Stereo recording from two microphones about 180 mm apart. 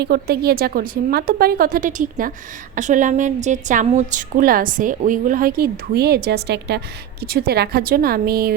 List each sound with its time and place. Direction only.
0.0 s a woman's voice: 60° right (ahead or behind)